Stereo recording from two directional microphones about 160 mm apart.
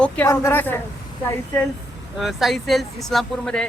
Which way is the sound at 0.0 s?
15° left (ahead or behind).